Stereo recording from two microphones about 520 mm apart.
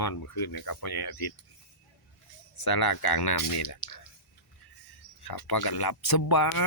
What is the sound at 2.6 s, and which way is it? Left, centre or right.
Speech, left.